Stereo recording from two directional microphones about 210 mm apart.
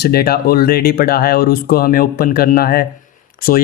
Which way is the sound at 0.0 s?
45° left (ahead or behind).